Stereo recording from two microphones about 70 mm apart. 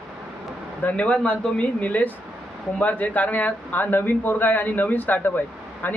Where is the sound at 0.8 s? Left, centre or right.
Centre.